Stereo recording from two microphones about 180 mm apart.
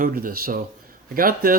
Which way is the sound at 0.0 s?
50° right (ahead or behind).